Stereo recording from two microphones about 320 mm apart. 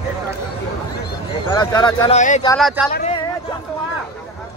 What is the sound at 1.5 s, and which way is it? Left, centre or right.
Speech, centre.